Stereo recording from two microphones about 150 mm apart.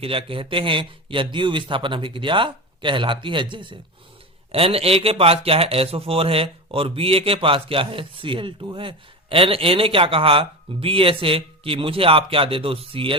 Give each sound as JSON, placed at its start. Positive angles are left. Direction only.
{"t": 0.0, "sound": "speech", "side_deg": -35}